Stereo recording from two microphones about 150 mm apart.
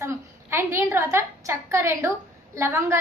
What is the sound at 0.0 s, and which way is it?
A woman's voice, 15° right (ahead or behind).